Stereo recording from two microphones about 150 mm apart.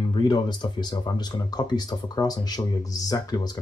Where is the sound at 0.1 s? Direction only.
30° left (ahead or behind).